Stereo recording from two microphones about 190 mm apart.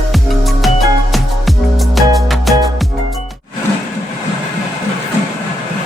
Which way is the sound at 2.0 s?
Centre (ahead or behind).